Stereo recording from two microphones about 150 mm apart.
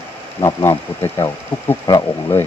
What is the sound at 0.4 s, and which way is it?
Speech, 15° left (ahead or behind).